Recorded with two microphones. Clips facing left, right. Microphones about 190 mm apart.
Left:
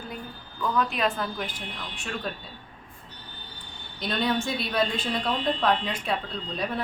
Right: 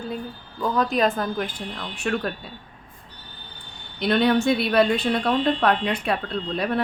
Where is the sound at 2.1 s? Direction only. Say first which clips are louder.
Right 10 dB; 70° right (ahead or behind).